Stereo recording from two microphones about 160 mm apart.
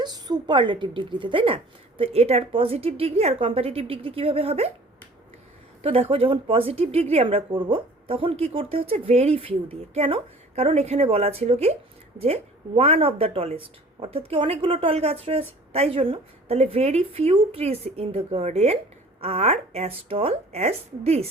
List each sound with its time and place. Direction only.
0.0 s speech: 25° right (ahead or behind)
5.8 s speech: 35° right (ahead or behind)